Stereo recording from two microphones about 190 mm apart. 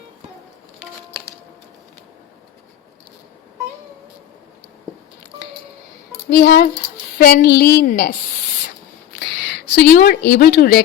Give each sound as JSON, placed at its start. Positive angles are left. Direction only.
{"t": 6.3, "sound": "a woman's voice", "side_deg": 55}
{"t": 9.7, "sound": "speech", "side_deg": 50}